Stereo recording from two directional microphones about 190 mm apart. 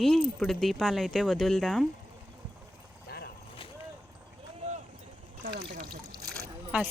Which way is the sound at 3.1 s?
55° left (ahead or behind).